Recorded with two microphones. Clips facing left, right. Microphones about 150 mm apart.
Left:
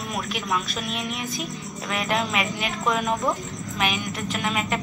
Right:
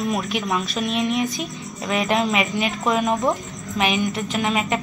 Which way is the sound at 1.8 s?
15° right (ahead or behind).